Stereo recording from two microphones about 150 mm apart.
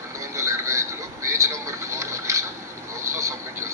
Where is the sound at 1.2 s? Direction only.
20° right (ahead or behind).